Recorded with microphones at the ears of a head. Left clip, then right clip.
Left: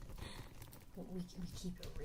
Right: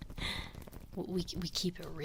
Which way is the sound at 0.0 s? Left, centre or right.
Right.